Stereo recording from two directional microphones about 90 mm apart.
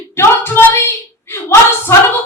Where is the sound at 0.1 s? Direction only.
25° left (ahead or behind).